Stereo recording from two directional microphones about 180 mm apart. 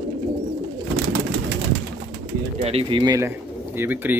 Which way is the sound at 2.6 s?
35° right (ahead or behind).